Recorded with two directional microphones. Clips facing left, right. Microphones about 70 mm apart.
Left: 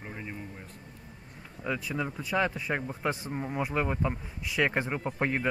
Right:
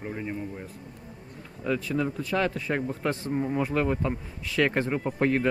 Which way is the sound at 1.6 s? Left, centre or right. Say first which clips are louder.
Right 5 dB; centre.